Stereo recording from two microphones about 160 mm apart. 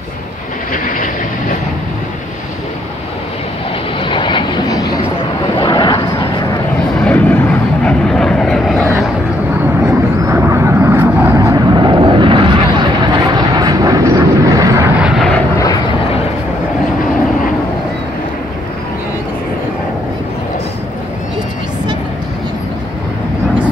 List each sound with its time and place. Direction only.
0.8 s vehicle: 55° left (ahead or behind)
4.0 s vehicle: 30° left (ahead or behind)
5.6 s a sound: 30° left (ahead or behind)
7.0 s vehicle: 10° left (ahead or behind)
10.2 s vehicle: 15° right (ahead or behind)
11.3 s vehicle: 25° right (ahead or behind)
15.0 s vehicle: centre (ahead or behind)
15.5 s vehicle: 20° left (ahead or behind)